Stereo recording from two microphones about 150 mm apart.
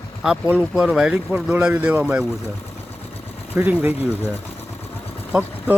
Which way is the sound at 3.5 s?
10° right (ahead or behind).